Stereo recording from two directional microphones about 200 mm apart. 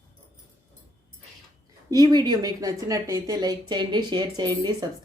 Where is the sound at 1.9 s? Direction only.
20° right (ahead or behind).